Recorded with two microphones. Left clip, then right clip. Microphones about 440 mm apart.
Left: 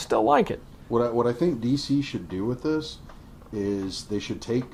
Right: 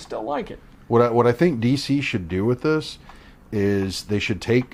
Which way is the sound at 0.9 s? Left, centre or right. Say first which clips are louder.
Right 6 dB; right.